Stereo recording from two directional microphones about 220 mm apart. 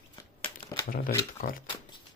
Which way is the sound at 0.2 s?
20° left (ahead or behind).